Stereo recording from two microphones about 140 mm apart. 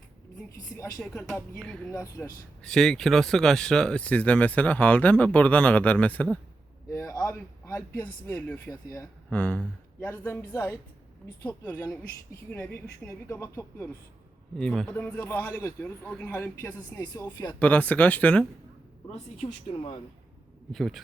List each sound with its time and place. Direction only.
0.9 s speech: centre (ahead or behind)
1.9 s speech: 25° left (ahead or behind)
2.6 s a man's voice: 5° left (ahead or behind)
13.1 s speech: 20° left (ahead or behind)
14.5 s speech: 5° left (ahead or behind)
17.0 s speech: 30° left (ahead or behind)
17.5 s speech: 10° left (ahead or behind)
20.7 s speech: centre (ahead or behind)